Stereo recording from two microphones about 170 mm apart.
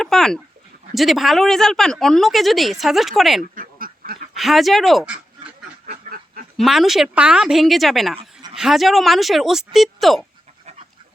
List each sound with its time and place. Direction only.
0.0 s speech: 5° left (ahead or behind)
3.4 s duck: 55° right (ahead or behind)
4.4 s speech: centre (ahead or behind)
5.8 s duck: 55° right (ahead or behind)
6.6 s speech: centre (ahead or behind)
8.2 s a sound: 25° right (ahead or behind)
8.5 s speech: centre (ahead or behind)